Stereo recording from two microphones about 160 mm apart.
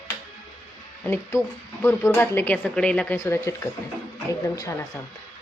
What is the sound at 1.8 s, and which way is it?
A woman's voice, 15° left (ahead or behind).